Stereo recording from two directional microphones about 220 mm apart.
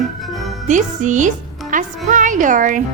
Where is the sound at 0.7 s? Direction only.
35° right (ahead or behind).